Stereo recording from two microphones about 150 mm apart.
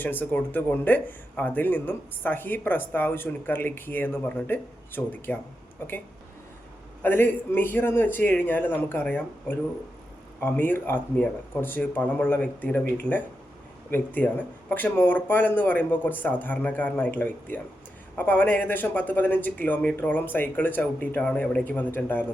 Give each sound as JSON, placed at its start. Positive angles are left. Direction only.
{"t": 0.0, "sound": "speech", "side_deg": 10}
{"t": 7.0, "sound": "speech", "side_deg": 15}